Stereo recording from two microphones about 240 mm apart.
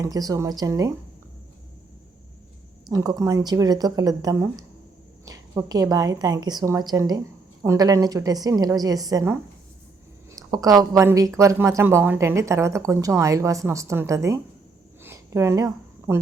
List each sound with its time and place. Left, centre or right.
0.0 s speech: centre
2.9 s speech: centre
15.0 s a sound: centre